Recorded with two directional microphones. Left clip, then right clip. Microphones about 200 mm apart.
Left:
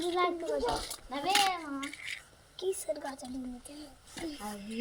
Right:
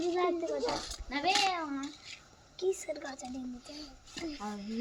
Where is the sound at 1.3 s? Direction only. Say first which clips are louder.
Left 1 dB; 60° left (ahead or behind).